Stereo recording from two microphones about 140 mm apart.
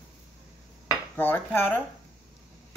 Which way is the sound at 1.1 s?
15° left (ahead or behind).